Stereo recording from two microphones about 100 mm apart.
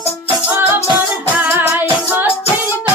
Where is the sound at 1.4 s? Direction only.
20° right (ahead or behind).